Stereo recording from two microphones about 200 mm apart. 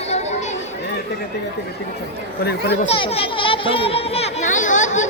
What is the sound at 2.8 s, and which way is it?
Children playing, 25° left (ahead or behind).